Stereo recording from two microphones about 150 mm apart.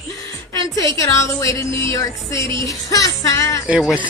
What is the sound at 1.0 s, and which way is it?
Speech, 20° left (ahead or behind).